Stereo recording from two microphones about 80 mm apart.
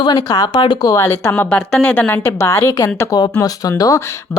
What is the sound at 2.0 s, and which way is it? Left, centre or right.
Speech, left.